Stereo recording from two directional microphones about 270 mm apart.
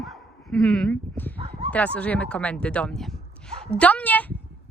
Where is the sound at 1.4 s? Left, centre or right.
Right.